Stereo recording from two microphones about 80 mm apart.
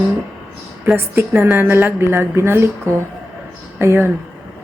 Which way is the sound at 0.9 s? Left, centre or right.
Right.